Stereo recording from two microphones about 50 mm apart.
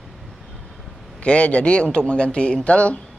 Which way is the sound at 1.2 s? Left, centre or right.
Left.